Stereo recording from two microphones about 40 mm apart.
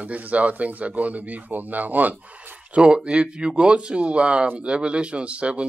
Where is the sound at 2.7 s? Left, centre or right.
Right.